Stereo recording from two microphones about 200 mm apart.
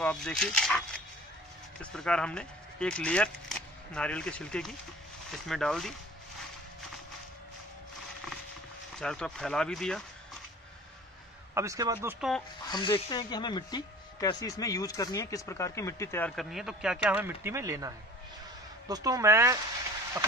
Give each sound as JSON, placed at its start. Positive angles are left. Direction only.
{"t": 0.0, "sound": "speech", "side_deg": 5}
{"t": 9.0, "sound": "speech", "side_deg": 5}
{"t": 11.5, "sound": "speech", "side_deg": -15}
{"t": 12.2, "sound": "speech", "side_deg": 0}
{"t": 12.7, "sound": "speech", "side_deg": 20}